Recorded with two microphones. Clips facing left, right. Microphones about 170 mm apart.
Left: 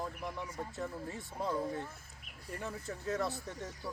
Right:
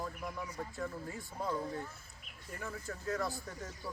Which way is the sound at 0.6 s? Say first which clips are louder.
Even; 20° left (ahead or behind).